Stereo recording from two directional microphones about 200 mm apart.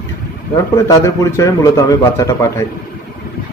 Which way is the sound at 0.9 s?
15° left (ahead or behind).